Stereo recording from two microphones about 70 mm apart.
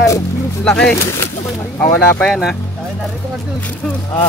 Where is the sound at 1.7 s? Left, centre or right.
Left.